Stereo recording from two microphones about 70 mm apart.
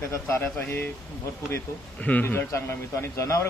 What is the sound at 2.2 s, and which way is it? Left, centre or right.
Speech, left.